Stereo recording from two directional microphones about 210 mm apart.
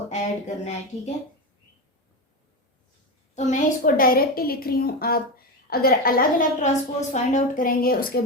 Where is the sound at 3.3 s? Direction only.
35° left (ahead or behind).